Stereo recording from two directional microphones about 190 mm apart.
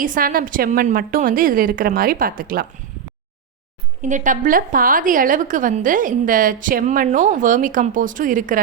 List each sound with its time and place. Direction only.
0.0 s a woman's voice: 45° right (ahead or behind)
4.0 s a woman's voice: 40° right (ahead or behind)